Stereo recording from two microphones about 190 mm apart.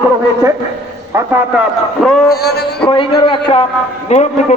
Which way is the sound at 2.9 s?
25° left (ahead or behind).